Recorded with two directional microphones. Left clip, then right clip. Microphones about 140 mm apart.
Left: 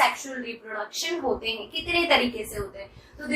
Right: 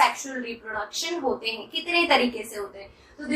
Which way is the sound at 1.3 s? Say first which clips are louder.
Even; 15° right (ahead or behind).